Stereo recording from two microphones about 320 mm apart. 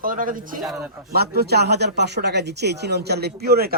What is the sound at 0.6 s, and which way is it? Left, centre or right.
Speech, centre.